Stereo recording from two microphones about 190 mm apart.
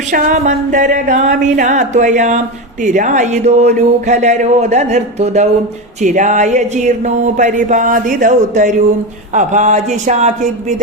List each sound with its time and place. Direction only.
0.1 s speech: 40° right (ahead or behind)